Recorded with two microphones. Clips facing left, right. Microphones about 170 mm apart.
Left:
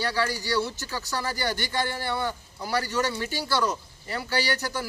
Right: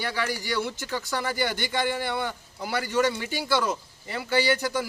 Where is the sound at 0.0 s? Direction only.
20° right (ahead or behind).